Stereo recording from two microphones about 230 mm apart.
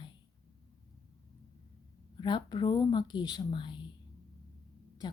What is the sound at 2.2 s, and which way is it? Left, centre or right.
A woman's voice, centre.